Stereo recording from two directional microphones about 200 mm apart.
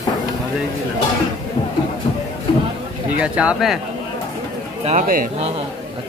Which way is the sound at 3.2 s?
5° right (ahead or behind).